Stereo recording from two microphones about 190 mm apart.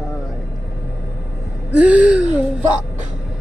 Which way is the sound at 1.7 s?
5° right (ahead or behind).